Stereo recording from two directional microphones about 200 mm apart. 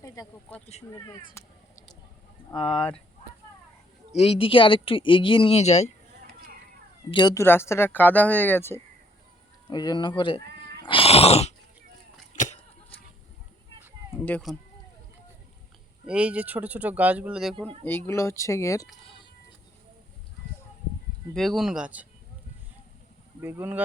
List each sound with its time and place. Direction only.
0.0 s speech: 15° left (ahead or behind)
2.6 s speech: 5° left (ahead or behind)
4.1 s speech: 30° left (ahead or behind)
7.1 s speech: 20° left (ahead or behind)
9.6 s speech: 20° left (ahead or behind)
10.8 s cat: 25° left (ahead or behind)
12.3 s a sound: 35° left (ahead or behind)
13.8 s a sound: 5° right (ahead or behind)
14.3 s speech: 5° left (ahead or behind)
16.0 s speech: 5° right (ahead or behind)
17.8 s speech: 10° left (ahead or behind)
21.3 s speech: centre (ahead or behind)
23.4 s speech: 10° right (ahead or behind)